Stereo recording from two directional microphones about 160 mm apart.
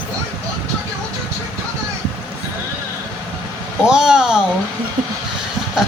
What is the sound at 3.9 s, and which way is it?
Speech, 5° right (ahead or behind).